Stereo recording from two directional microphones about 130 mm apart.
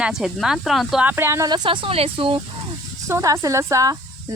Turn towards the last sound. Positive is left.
turn(degrees=-25)  # may be behind; listen again after turning